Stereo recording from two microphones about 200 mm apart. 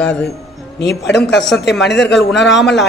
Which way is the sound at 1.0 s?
60° left (ahead or behind).